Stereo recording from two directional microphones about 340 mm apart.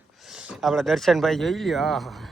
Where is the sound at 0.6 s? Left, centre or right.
Centre.